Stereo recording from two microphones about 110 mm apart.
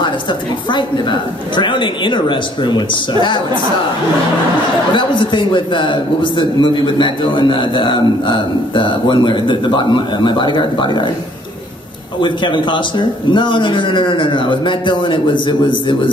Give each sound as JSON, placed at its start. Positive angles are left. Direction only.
{"t": 0.0, "sound": "a man's voice", "side_deg": 45}
{"t": 4.9, "sound": "a man's voice", "side_deg": 45}
{"t": 12.2, "sound": "a man's voice", "side_deg": 45}